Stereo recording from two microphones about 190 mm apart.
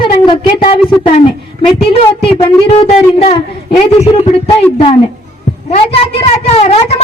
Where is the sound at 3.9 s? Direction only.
35° left (ahead or behind).